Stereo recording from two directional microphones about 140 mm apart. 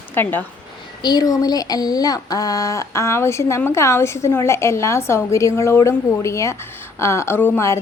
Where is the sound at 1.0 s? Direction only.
30° left (ahead or behind).